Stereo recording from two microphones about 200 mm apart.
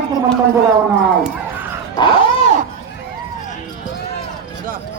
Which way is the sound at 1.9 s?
25° left (ahead or behind).